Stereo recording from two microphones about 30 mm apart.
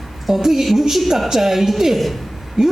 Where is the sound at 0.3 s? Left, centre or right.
Centre.